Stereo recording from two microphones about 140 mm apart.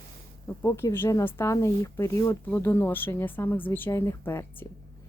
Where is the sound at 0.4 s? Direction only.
20° left (ahead or behind).